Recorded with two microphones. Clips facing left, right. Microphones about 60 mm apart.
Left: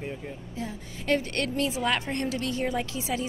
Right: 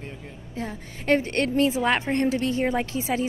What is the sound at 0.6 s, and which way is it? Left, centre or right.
A woman's voice, right.